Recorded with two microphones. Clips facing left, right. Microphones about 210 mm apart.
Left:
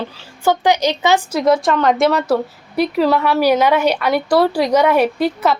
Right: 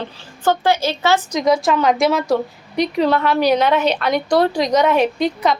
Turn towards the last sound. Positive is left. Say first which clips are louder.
# left 1 dB
turn(degrees=5)  # may be behind; listen again after turning